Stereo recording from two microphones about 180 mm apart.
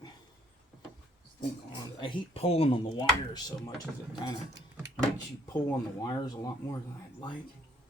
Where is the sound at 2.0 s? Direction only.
25° left (ahead or behind).